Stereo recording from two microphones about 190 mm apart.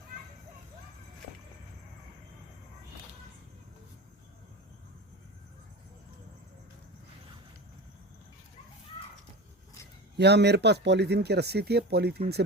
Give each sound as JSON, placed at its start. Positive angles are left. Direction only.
{"t": 10.2, "sound": "speech", "side_deg": -60}